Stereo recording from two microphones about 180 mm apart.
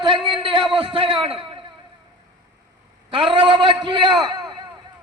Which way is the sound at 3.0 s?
30° right (ahead or behind).